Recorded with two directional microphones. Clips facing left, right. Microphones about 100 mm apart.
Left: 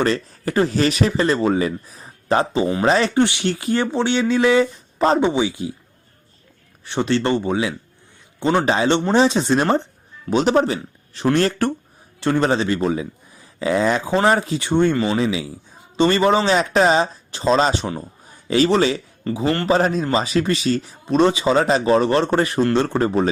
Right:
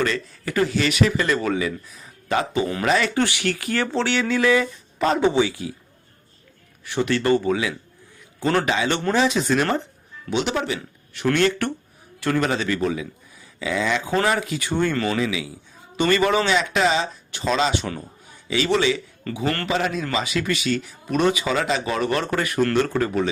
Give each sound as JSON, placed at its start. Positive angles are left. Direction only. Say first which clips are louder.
{"t": 0.0, "sound": "speech", "louder": "left 4 dB", "side_deg": 35}
{"t": 5.2, "sound": "speech", "louder": "even", "side_deg": 20}
{"t": 6.8, "sound": "speech", "louder": "left 1 dB", "side_deg": 30}
{"t": 8.7, "sound": "speech", "louder": "left 4 dB", "side_deg": 35}
{"t": 10.2, "sound": "speech", "louder": "left 7 dB", "side_deg": 40}
{"t": 19.2, "sound": "speech", "louder": "left 7 dB", "side_deg": 30}